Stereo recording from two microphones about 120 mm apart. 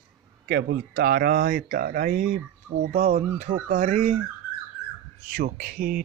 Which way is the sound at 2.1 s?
90° right.